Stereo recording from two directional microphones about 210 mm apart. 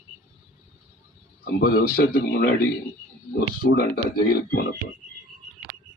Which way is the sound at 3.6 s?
50° left (ahead or behind).